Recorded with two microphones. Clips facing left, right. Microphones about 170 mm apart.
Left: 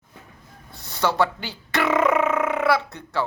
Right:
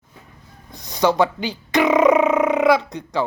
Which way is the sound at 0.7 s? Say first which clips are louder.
Right 6 dB; 15° right (ahead or behind).